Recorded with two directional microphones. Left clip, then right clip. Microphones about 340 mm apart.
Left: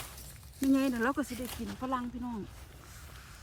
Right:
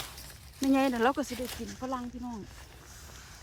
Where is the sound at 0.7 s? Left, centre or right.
Centre.